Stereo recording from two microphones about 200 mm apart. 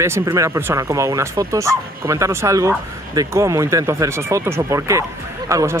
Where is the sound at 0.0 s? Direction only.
15° right (ahead or behind).